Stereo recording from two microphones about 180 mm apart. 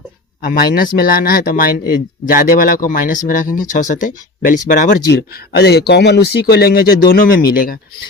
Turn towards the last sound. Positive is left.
turn(degrees=55)  # may be behind; listen again after turning